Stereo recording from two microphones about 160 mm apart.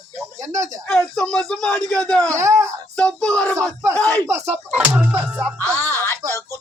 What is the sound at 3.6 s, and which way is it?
Speech, 20° right (ahead or behind).